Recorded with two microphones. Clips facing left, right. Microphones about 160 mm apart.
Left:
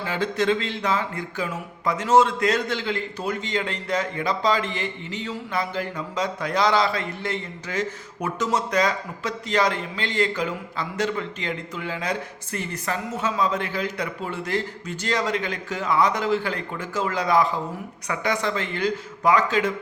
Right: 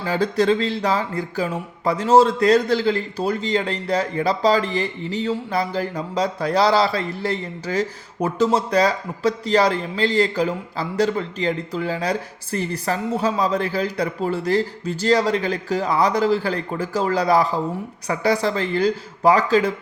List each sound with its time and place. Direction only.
0.0 s speech: 35° right (ahead or behind)